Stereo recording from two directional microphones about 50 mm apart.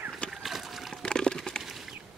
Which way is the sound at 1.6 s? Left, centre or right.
Centre.